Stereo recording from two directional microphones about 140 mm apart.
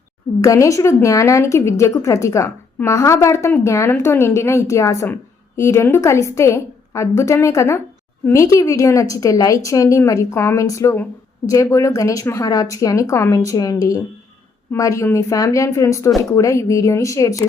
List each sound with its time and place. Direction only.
0.4 s a woman's voice: 20° left (ahead or behind)